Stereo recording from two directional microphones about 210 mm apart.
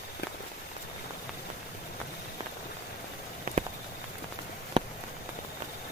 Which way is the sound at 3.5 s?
40° right (ahead or behind).